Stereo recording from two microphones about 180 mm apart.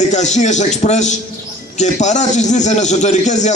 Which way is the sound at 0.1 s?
40° left (ahead or behind).